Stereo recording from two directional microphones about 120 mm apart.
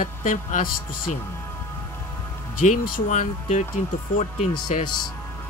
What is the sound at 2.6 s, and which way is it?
Speech, 90° left.